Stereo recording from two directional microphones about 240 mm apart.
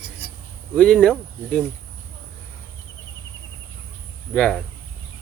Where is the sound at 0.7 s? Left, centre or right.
Centre.